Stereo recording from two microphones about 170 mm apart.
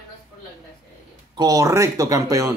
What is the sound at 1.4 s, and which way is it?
Speech, 20° right (ahead or behind).